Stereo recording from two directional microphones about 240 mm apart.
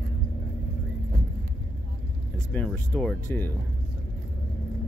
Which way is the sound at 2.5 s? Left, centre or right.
Centre.